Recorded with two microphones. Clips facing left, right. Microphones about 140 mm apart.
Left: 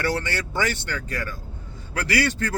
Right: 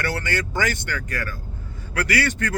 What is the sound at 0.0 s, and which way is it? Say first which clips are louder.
A man's voice: even; 30° left (ahead or behind).